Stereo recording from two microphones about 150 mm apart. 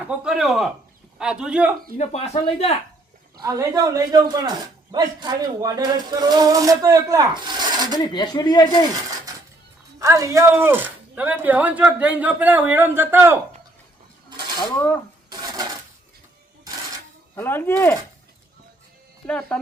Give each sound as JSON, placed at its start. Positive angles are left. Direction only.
{"t": 0.1, "sound": "speech", "side_deg": 0}
{"t": 2.0, "sound": "speech", "side_deg": 45}
{"t": 3.3, "sound": "a man's voice", "side_deg": -20}
{"t": 7.9, "sound": "speech", "side_deg": 30}
{"t": 10.0, "sound": "speech", "side_deg": -20}
{"t": 14.8, "sound": "speech", "side_deg": 15}
{"t": 15.3, "sound": "dishes", "side_deg": -25}
{"t": 17.3, "sound": "speech", "side_deg": 15}
{"t": 19.2, "sound": "speech", "side_deg": 5}